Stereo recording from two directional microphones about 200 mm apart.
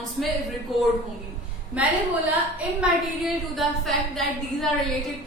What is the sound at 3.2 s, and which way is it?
A woman's voice, centre (ahead or behind).